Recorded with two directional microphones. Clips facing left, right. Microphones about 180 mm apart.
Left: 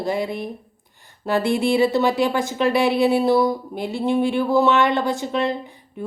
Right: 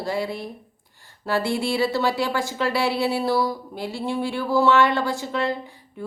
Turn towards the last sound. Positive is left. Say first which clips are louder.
# left 3 dB
turn(degrees=20)  # may be behind; listen again after turning